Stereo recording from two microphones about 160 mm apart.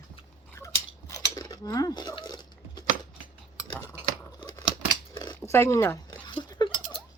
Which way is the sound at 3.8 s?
10° right (ahead or behind).